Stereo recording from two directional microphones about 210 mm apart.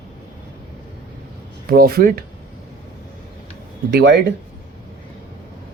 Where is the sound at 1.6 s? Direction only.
45° right (ahead or behind).